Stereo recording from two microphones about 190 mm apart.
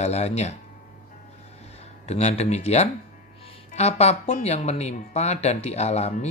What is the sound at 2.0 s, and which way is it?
Speech, 35° left (ahead or behind).